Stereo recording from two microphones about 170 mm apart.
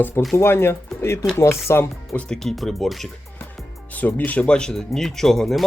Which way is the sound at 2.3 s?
Centre (ahead or behind).